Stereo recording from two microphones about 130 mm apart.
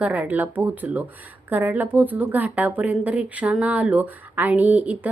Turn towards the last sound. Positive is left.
turn(degrees=-15)  # may be behind; listen again after turning